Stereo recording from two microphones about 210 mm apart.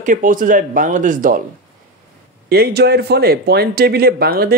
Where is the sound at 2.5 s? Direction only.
50° right (ahead or behind).